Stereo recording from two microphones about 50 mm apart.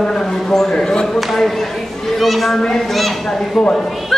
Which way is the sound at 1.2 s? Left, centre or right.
Centre.